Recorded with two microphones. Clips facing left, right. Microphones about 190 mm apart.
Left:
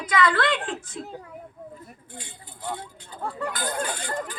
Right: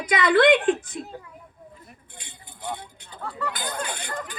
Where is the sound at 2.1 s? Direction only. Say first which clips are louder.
Left 4 dB; 15° right (ahead or behind).